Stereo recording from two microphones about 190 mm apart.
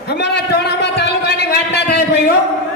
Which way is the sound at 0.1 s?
60° left (ahead or behind).